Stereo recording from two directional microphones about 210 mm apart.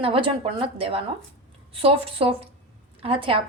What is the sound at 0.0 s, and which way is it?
A woman's voice, 25° right (ahead or behind).